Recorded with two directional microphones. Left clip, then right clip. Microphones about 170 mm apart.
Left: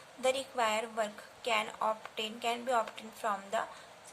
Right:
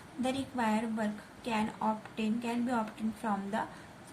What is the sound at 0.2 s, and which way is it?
A woman's voice, 20° left (ahead or behind).